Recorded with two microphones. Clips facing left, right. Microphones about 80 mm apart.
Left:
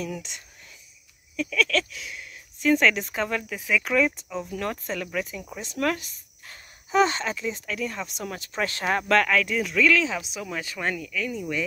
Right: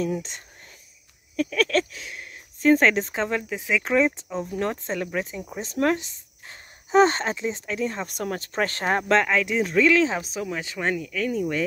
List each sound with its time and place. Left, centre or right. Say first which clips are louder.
0.0 s speech: right 6 dB; right
8.1 s speech: right 5 dB; right